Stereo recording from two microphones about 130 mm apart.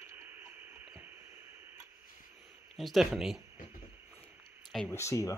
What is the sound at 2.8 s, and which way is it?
Speech, centre (ahead or behind).